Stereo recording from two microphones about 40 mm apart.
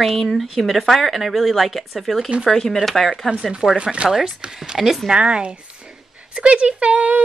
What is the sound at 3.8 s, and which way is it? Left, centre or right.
Speech, right.